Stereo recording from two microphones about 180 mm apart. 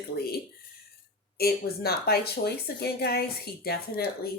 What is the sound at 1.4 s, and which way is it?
Speech, 60° left (ahead or behind).